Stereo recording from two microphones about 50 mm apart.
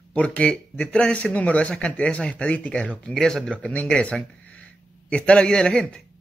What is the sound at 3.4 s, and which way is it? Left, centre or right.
A man's voice, left.